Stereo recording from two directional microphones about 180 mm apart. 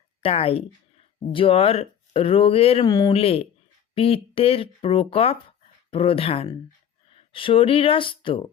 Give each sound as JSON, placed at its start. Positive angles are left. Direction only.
{"t": 0.2, "sound": "speech", "side_deg": 35}
{"t": 2.8, "sound": "speech", "side_deg": 20}
{"t": 3.1, "sound": "speech", "side_deg": 35}